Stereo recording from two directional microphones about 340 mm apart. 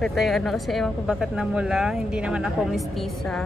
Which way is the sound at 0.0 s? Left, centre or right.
Centre.